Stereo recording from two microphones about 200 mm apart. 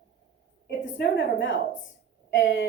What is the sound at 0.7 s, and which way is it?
A woman's voice, 65° left (ahead or behind).